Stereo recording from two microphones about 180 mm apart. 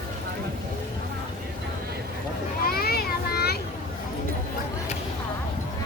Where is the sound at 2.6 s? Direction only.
55° left (ahead or behind).